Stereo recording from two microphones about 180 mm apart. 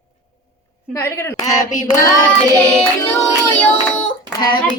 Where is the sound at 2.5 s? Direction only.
5° left (ahead or behind).